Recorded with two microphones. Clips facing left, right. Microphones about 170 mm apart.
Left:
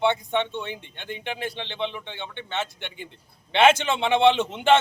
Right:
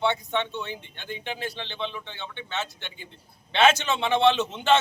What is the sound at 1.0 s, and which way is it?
Speech, 55° left (ahead or behind).